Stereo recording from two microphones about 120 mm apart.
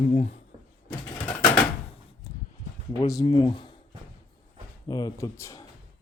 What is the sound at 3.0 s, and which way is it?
Speech, 30° left (ahead or behind).